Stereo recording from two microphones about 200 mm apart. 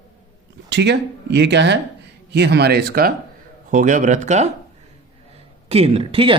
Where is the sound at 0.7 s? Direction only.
60° right (ahead or behind); by 4.5 s 35° right (ahead or behind).